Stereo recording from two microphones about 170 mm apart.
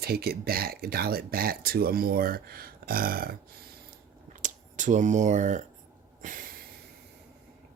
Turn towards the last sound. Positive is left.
turn(degrees=-50)  # may be behind; listen again after turning